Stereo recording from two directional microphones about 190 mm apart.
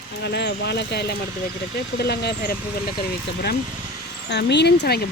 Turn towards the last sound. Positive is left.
turn(degrees=60)  # may be behind; listen again after turning